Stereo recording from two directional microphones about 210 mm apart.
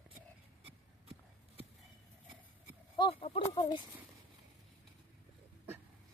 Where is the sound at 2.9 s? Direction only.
25° left (ahead or behind).